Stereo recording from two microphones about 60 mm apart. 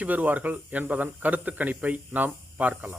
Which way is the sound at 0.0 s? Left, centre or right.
Right.